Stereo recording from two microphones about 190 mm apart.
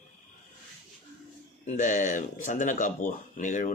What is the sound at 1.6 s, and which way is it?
Speech, 40° left (ahead or behind).